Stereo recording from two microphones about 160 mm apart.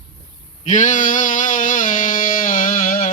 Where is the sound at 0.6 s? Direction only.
50° left (ahead or behind).